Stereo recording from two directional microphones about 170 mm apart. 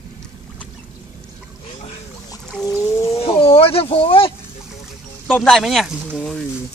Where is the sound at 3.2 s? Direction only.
35° left (ahead or behind).